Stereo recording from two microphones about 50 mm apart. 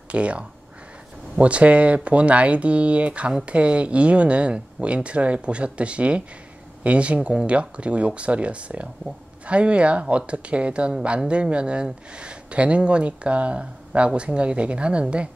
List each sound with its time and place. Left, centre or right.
0.1 s speech: right